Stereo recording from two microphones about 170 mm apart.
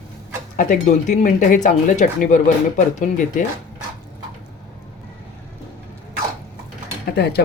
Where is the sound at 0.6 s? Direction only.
50° left (ahead or behind).